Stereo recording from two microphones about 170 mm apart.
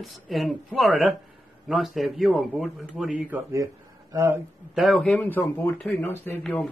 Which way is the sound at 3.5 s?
20° right (ahead or behind).